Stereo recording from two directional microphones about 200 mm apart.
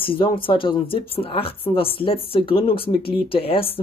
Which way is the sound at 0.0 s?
25° left (ahead or behind).